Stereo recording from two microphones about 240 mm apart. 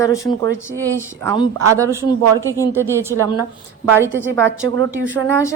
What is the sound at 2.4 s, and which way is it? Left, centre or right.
Speech, centre.